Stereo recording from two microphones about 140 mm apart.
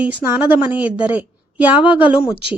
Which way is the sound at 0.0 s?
10° right (ahead or behind).